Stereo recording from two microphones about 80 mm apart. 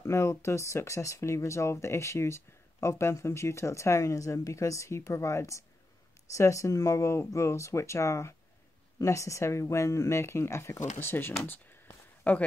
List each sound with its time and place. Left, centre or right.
0.0 s speech: left